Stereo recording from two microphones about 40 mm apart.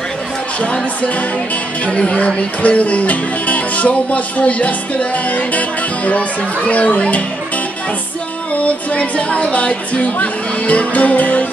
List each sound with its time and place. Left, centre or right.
1.9 s speech: left
6.7 s speech: left
8.5 s speech: left